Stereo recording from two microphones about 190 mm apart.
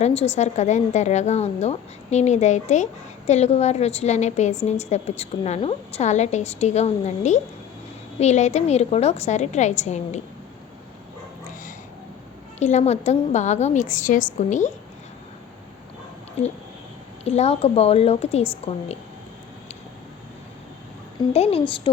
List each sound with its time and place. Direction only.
0.0 s a woman's voice: 35° left (ahead or behind)
12.5 s a woman's voice: 40° left (ahead or behind)
17.2 s a woman's voice: 35° left (ahead or behind)
21.3 s a woman's voice: 30° left (ahead or behind)